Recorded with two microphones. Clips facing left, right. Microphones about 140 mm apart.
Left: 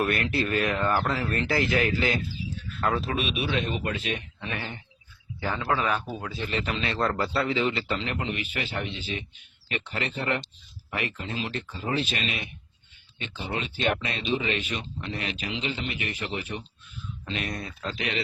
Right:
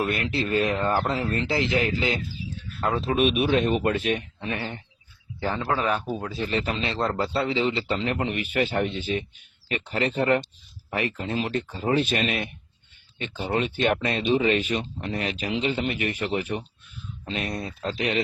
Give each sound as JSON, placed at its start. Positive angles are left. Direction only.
{"t": 0.0, "sound": "speech", "side_deg": -15}
{"t": 3.2, "sound": "speech", "side_deg": -50}
{"t": 4.4, "sound": "speech", "side_deg": -35}
{"t": 6.0, "sound": "speech", "side_deg": -15}
{"t": 6.2, "sound": "speech", "side_deg": -35}